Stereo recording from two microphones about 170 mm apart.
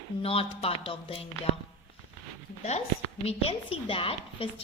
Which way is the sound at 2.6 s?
40° left (ahead or behind).